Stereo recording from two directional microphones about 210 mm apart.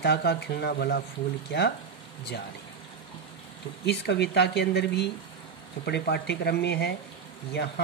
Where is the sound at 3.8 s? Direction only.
55° left (ahead or behind).